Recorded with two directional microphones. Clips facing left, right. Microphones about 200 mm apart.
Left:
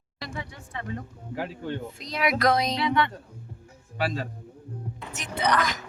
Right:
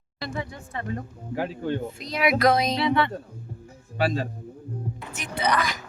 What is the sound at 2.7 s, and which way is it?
Speech, 30° right (ahead or behind).